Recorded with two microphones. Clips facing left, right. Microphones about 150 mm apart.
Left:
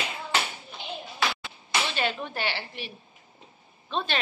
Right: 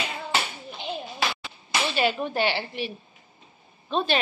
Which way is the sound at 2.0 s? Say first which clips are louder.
Right 6 dB; 15° right (ahead or behind).